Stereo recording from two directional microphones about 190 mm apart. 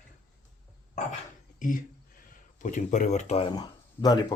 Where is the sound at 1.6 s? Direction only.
45° left (ahead or behind).